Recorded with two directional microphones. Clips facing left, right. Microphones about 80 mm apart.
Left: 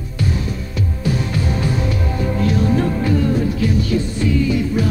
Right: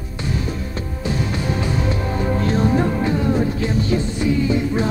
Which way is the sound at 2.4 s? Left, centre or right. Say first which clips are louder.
Left 1 dB; right.